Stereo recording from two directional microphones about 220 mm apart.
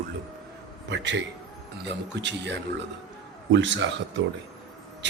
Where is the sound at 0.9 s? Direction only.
55° right (ahead or behind).